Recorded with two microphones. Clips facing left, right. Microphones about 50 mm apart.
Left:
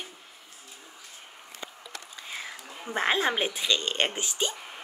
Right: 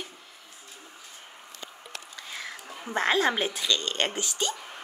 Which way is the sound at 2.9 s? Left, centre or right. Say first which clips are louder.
Right 1 dB; centre.